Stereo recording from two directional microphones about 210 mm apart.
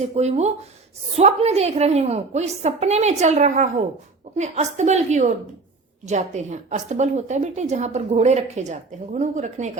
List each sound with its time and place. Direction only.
0.0 s a woman's voice: 30° right (ahead or behind)